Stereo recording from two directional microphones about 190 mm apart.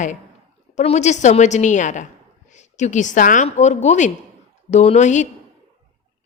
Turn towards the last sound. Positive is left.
turn(degrees=40)  # may be behind; listen again after turning